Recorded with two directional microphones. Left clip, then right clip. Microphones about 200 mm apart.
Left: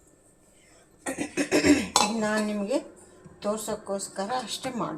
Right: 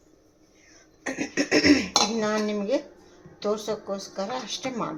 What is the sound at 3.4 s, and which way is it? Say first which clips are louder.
A woman's voice: right 2 dB; 15° right (ahead or behind).